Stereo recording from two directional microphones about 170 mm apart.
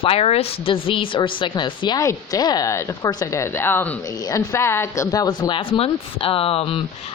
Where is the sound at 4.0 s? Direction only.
20° left (ahead or behind).